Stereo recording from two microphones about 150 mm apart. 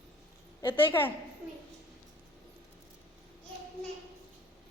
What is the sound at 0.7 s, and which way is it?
Speech, 15° left (ahead or behind).